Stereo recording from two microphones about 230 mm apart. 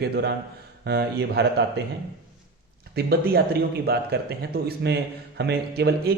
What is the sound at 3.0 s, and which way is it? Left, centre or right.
Speech, right.